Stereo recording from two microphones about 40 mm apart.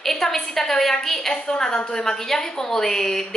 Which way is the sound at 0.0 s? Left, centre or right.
Centre.